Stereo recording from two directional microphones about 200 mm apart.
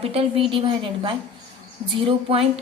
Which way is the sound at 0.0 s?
30° right (ahead or behind).